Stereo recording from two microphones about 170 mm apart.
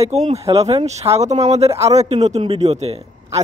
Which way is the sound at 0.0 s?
40° right (ahead or behind).